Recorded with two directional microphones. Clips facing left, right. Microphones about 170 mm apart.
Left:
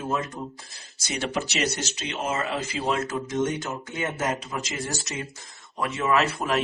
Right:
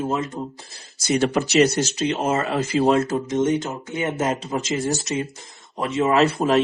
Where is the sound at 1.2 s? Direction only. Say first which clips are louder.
Right 9 dB; 45° right (ahead or behind).